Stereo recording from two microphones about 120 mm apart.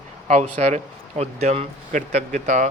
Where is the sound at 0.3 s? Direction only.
85° right.